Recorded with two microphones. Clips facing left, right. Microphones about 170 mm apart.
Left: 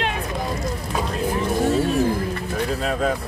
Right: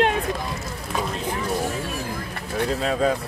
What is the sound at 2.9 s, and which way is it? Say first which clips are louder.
Speech: right 2 dB; centre (ahead or behind).